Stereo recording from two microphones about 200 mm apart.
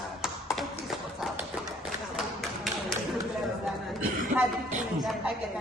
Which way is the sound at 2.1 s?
Centre (ahead or behind).